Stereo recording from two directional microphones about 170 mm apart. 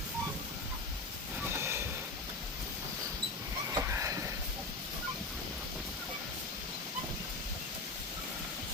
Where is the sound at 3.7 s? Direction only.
15° right (ahead or behind).